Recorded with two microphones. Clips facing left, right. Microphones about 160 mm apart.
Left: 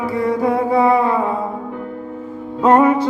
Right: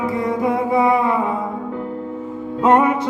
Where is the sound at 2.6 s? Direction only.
30° left (ahead or behind).